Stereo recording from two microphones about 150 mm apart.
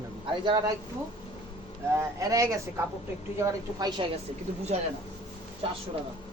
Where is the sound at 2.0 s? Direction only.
20° right (ahead or behind).